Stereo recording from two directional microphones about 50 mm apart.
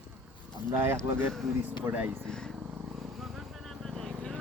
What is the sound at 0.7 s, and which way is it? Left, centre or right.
Speech, right.